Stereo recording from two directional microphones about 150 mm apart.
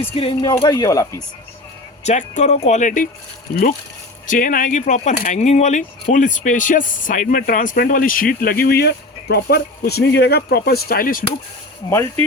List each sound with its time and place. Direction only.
0.2 s speech: 35° left (ahead or behind)
2.0 s speech: 50° left (ahead or behind)
4.3 s speech: 65° left (ahead or behind)
11.9 s speech: 20° left (ahead or behind)